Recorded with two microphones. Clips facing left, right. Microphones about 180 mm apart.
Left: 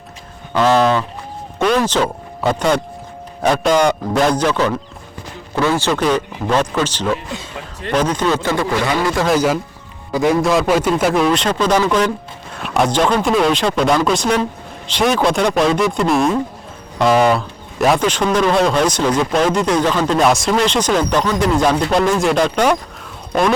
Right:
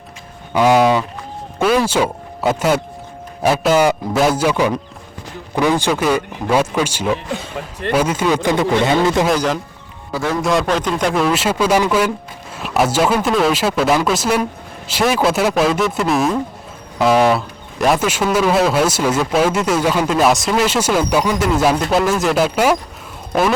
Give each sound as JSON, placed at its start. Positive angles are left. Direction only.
{"t": 0.5, "sound": "a man's voice", "side_deg": -10}
{"t": 9.2, "sound": "speech", "side_deg": 5}